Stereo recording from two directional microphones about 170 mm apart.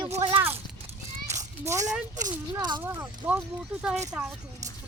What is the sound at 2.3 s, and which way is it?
Speech, 25° right (ahead or behind).